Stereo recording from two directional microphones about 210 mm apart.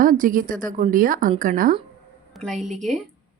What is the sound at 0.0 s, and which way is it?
A woman's voice, 40° right (ahead or behind).